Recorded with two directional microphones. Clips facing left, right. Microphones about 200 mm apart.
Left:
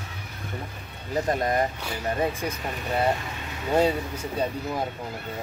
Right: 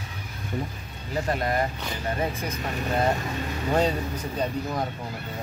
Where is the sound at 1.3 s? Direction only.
20° left (ahead or behind).